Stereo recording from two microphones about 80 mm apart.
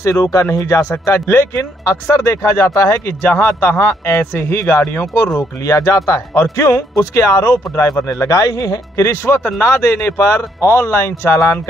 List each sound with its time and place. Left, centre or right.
0.0 s speech: left
3.2 s speech: left
7.5 s speech: left
8.1 s speech: left